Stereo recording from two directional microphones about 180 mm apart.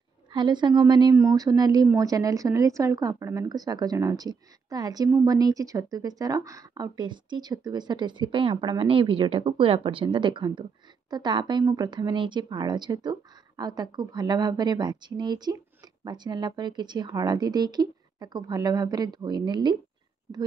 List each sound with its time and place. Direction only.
0.3 s a woman's voice: 25° right (ahead or behind)